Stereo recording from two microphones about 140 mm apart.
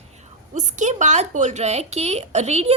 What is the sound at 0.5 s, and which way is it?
Speech, 60° right (ahead or behind).